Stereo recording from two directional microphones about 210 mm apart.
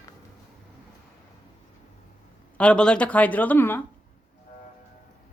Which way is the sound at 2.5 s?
5° left (ahead or behind).